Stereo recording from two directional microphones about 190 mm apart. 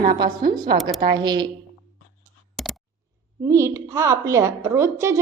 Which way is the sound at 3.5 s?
15° right (ahead or behind).